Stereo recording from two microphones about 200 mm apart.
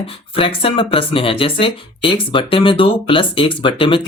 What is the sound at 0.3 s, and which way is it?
Speech, 25° left (ahead or behind).